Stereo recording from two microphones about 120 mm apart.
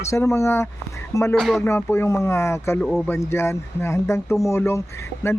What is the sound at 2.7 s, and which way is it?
Speech, 5° left (ahead or behind).